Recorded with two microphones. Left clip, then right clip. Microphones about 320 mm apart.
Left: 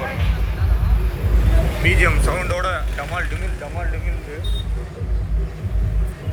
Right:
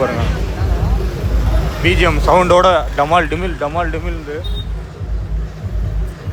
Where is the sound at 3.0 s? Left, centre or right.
Right.